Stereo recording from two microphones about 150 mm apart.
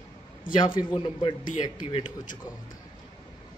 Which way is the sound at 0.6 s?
30° left (ahead or behind).